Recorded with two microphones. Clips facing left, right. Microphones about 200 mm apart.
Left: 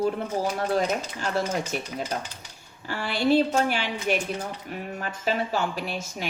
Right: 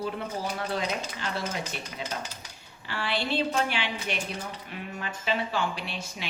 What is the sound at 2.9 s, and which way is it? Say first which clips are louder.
Speech: left 7 dB; 45° left (ahead or behind).